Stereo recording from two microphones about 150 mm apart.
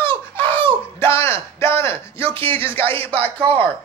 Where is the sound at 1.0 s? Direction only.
15° left (ahead or behind).